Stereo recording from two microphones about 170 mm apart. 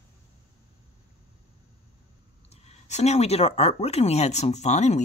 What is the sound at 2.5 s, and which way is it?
Speech, 40° left (ahead or behind).